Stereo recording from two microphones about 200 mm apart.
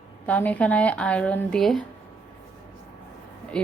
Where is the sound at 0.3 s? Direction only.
5° left (ahead or behind).